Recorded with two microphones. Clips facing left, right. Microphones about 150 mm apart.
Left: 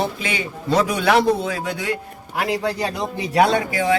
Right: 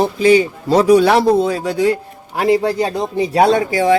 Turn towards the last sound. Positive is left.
turn(degrees=-35)  # may be behind; listen again after turning